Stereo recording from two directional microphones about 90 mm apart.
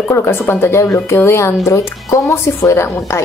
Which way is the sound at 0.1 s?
25° left (ahead or behind).